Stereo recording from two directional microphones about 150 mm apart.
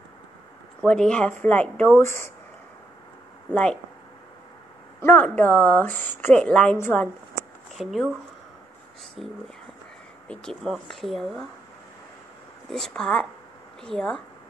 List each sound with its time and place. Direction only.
0.8 s a woman's voice: 5° left (ahead or behind)
5.0 s a woman's voice: 10° left (ahead or behind)
7.7 s speech: centre (ahead or behind)
9.2 s speech: centre (ahead or behind)
12.6 s speech: centre (ahead or behind)